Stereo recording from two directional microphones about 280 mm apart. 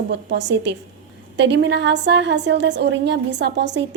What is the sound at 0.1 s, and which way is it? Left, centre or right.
A woman's voice, right.